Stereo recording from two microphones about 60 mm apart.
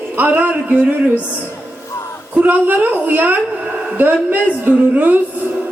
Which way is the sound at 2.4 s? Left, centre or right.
Right.